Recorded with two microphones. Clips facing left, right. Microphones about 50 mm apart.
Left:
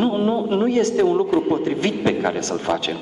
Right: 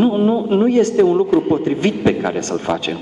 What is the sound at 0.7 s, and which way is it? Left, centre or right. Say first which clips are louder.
Speech: right 4 dB; right.